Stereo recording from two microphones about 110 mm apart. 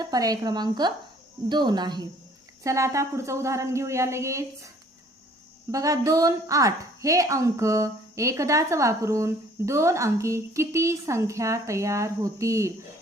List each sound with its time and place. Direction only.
0.0 s a woman's voice: 35° right (ahead or behind)
2.6 s a woman's voice: 25° right (ahead or behind)
5.7 s a woman's voice: 30° right (ahead or behind)